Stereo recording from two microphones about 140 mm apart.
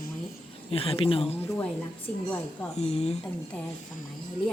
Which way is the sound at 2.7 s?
50° left (ahead or behind).